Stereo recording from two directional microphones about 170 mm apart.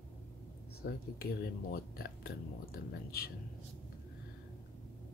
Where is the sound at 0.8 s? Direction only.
70° left (ahead or behind).